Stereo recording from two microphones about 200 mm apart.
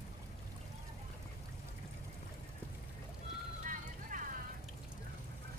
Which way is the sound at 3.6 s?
40° right (ahead or behind).